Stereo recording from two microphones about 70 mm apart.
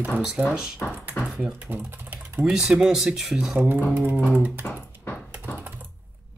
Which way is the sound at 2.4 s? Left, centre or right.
Centre.